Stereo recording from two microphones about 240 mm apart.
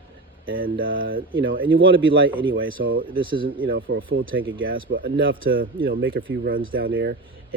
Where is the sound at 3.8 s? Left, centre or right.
Right.